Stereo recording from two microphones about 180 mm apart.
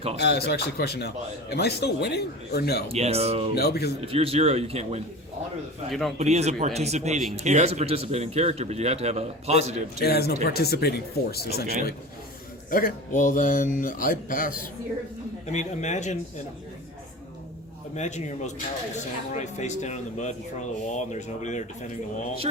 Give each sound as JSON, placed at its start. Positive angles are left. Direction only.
{"t": 0.2, "sound": "speech", "side_deg": 65}
{"t": 2.9, "sound": "speech", "side_deg": -35}
{"t": 3.5, "sound": "speech", "side_deg": 60}
{"t": 4.0, "sound": "speech", "side_deg": -30}
{"t": 5.9, "sound": "a man's voice", "side_deg": 0}
{"t": 6.1, "sound": "speech", "side_deg": -35}
{"t": 10.0, "sound": "speech", "side_deg": 60}
{"t": 12.7, "sound": "speech", "side_deg": 50}
{"t": 15.5, "sound": "speech", "side_deg": 40}
{"t": 17.9, "sound": "speech", "side_deg": 40}